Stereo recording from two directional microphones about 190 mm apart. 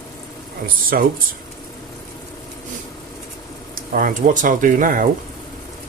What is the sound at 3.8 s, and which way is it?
Speech, 45° right (ahead or behind).